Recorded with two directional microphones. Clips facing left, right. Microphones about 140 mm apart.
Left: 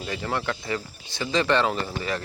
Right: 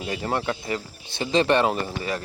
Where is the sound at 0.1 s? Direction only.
25° right (ahead or behind).